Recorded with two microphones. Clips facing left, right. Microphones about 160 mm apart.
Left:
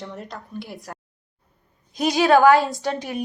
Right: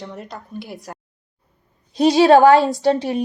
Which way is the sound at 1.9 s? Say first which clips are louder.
Right 5 dB; 30° right (ahead or behind).